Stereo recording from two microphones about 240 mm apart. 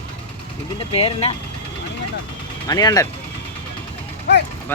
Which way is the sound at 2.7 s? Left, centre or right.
Centre.